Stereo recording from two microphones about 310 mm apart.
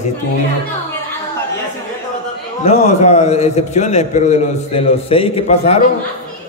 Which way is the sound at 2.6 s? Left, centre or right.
Centre.